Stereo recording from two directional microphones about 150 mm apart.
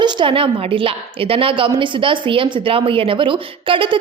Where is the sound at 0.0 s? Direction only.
35° right (ahead or behind).